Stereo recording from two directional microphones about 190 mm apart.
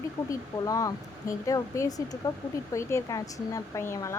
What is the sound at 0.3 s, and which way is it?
Speech, 20° left (ahead or behind).